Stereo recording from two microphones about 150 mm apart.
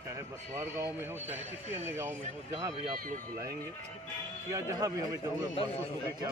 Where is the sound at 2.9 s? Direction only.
70° right (ahead or behind).